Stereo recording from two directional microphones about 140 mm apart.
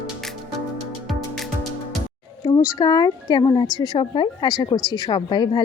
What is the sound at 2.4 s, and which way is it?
A woman's voice, 25° left (ahead or behind).